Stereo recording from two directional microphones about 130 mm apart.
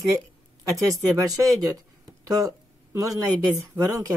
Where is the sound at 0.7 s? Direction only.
25° right (ahead or behind).